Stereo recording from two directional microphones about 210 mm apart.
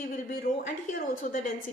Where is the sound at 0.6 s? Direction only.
40° left (ahead or behind).